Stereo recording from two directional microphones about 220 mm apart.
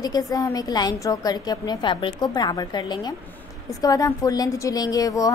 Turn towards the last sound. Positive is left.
turn(degrees=15)  # may be behind; listen again after turning